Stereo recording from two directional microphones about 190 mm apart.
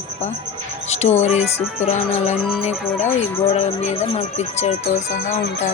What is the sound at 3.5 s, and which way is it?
Speech, 35° left (ahead or behind).